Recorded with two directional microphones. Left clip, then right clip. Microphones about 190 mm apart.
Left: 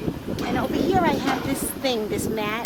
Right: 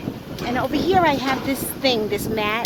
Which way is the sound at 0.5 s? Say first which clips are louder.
Right 4 dB; 35° right (ahead or behind).